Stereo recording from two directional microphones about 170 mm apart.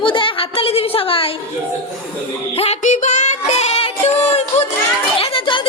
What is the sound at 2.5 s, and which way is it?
Child singing, 40° left (ahead or behind).